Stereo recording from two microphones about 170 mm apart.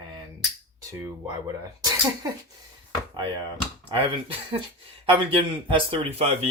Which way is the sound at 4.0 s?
30° right (ahead or behind).